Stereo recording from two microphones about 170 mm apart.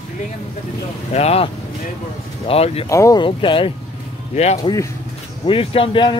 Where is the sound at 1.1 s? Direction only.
35° left (ahead or behind).